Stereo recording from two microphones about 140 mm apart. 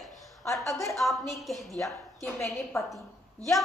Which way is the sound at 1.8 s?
20° left (ahead or behind).